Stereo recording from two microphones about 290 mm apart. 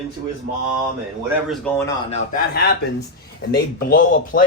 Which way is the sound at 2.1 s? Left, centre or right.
Left.